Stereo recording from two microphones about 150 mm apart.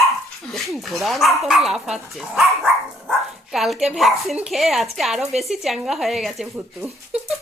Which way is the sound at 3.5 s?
Centre (ahead or behind).